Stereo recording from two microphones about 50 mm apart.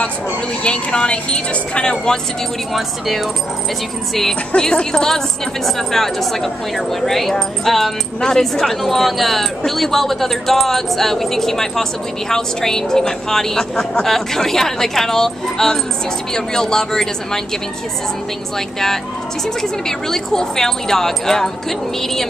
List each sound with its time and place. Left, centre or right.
0.7 s a woman's voice: centre
4.1 s speech: centre
4.6 s speech: centre
19.6 s speech: centre